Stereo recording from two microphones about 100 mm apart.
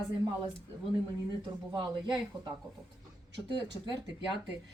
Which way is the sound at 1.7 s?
50° right (ahead or behind).